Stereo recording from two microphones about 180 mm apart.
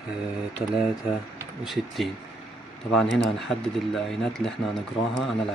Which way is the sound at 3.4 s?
Centre (ahead or behind).